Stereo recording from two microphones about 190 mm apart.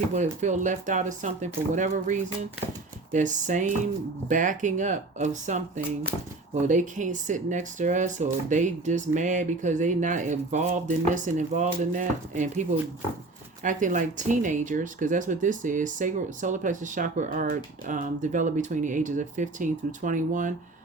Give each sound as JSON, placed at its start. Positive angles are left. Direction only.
{"t": 0.1, "sound": "speech", "side_deg": -40}